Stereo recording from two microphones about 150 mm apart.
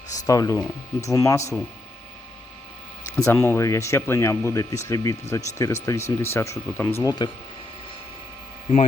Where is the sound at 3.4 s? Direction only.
20° left (ahead or behind).